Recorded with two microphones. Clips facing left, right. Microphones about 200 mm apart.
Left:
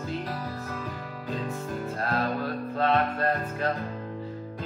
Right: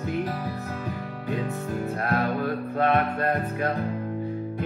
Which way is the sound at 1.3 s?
70° right (ahead or behind).